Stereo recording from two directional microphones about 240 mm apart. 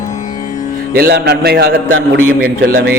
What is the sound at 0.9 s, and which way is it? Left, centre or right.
A man's voice, right.